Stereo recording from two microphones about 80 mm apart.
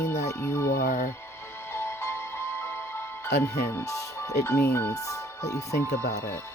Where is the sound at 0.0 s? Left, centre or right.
Left.